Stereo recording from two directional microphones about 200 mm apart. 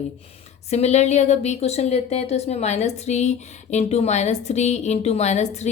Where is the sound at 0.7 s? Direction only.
35° left (ahead or behind).